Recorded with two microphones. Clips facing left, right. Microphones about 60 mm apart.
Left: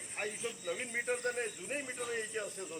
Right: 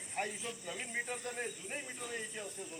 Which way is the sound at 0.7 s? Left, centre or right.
Left.